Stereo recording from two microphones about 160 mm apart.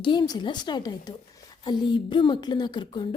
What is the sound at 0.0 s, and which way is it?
Speech, 25° left (ahead or behind).